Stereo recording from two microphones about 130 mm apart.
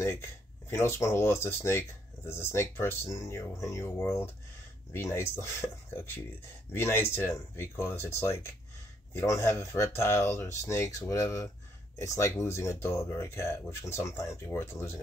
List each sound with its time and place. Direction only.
0.0 s speech: 20° left (ahead or behind)